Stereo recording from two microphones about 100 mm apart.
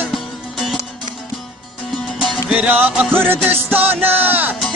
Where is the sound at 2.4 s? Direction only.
15° right (ahead or behind).